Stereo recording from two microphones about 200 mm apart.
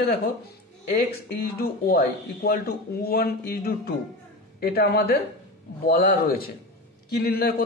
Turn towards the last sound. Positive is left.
turn(degrees=50)  # may be behind; listen again after turning